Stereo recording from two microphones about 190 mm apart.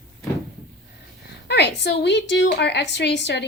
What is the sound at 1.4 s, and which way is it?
A woman's voice, 65° left (ahead or behind).